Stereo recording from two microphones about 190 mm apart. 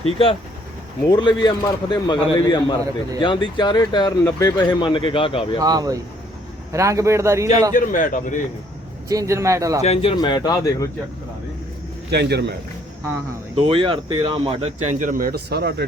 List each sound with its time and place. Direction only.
0.0 s speech: 30° left (ahead or behind)
5.5 s speech: 20° right (ahead or behind)
7.7 s a man's voice: 45° left (ahead or behind)
9.0 s speech: 15° right (ahead or behind)
9.8 s speech: 30° left (ahead or behind)
12.1 s a man's voice: 60° right (ahead or behind)
13.7 s speech: 30° right (ahead or behind); by 15.9 s 60° right (ahead or behind)